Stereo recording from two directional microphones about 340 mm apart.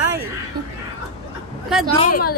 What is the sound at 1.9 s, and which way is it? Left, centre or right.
Speech, left.